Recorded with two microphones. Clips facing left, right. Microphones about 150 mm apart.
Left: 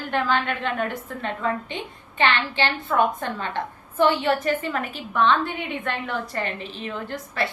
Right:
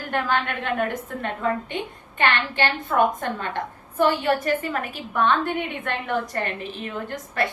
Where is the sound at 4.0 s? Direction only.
40° right (ahead or behind).